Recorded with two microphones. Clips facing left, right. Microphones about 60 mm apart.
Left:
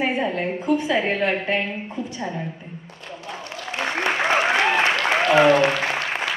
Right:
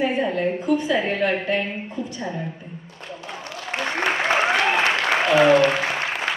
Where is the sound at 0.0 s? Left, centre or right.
Left.